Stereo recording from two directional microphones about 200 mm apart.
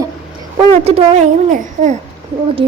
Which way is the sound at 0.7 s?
30° right (ahead or behind).